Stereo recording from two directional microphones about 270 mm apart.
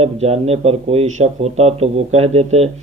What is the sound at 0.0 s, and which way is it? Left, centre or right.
Speech, right.